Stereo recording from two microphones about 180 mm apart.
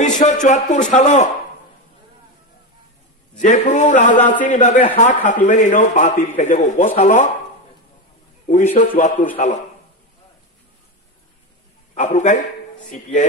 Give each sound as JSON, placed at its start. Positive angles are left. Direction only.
{"t": 0.0, "sound": "speech", "side_deg": 40}
{"t": 3.3, "sound": "a man's voice", "side_deg": 45}
{"t": 8.5, "sound": "a man's voice", "side_deg": 45}
{"t": 11.9, "sound": "a man's voice", "side_deg": 45}